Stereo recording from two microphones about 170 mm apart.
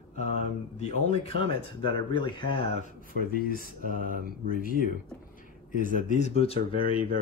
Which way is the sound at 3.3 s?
60° left (ahead or behind).